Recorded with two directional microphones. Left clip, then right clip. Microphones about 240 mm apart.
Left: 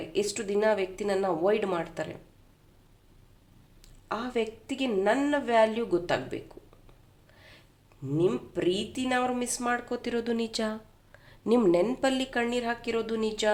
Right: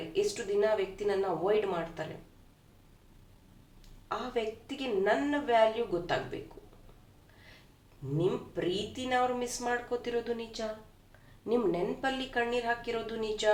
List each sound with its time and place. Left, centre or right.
0.1 s speech: left
4.1 s speech: left
8.5 s speech: left